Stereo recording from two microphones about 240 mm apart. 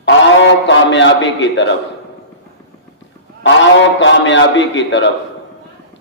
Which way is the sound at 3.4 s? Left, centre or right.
Left.